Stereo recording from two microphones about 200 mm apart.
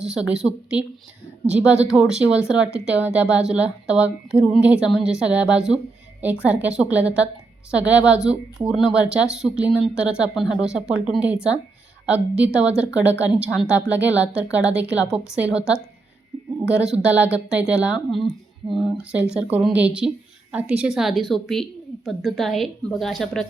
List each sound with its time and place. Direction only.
0.0 s a woman's voice: 5° right (ahead or behind)
16.3 s a sound: centre (ahead or behind)
16.9 s a woman's voice: 5° right (ahead or behind)